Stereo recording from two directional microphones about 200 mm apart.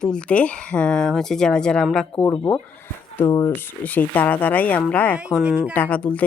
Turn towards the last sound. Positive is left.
turn(degrees=5)  # may be behind; listen again after turning